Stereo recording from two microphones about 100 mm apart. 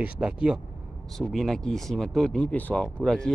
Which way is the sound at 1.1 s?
Centre (ahead or behind).